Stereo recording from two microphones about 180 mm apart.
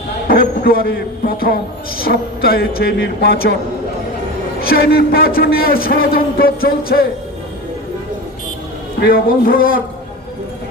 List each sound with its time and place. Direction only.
0.3 s a man's voice: 55° left (ahead or behind)
4.7 s a man's voice: 55° left (ahead or behind)
9.0 s speech: 55° left (ahead or behind)